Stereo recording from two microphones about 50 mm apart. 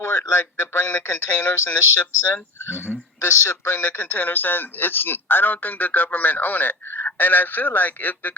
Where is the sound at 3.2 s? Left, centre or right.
Left.